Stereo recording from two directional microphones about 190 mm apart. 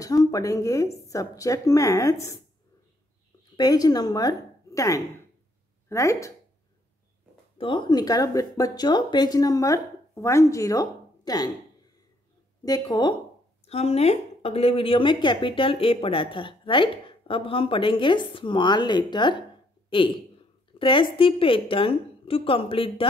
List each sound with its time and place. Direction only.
0.0 s a woman's voice: 20° left (ahead or behind)
3.5 s a woman's voice: 20° left (ahead or behind)
7.5 s speech: 25° left (ahead or behind)
12.6 s speech: 20° left (ahead or behind)
13.7 s speech: 35° left (ahead or behind)
20.8 s speech: 25° left (ahead or behind)